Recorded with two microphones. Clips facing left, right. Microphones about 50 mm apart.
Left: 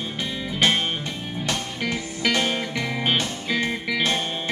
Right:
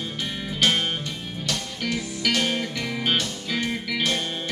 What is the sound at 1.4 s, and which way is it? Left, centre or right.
Music, left.